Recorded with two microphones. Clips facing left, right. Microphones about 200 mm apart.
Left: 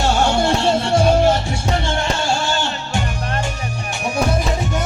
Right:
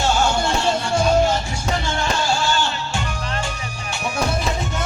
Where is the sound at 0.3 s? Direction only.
35° left (ahead or behind).